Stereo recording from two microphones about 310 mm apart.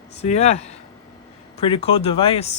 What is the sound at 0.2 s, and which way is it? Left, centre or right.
A woman's voice, left.